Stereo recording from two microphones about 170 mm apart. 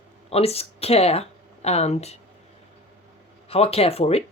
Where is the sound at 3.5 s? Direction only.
35° left (ahead or behind).